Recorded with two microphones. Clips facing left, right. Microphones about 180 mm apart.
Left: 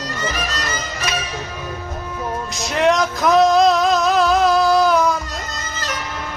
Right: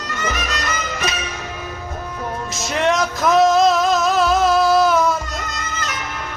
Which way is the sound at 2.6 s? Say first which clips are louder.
Left 2 dB; centre (ahead or behind).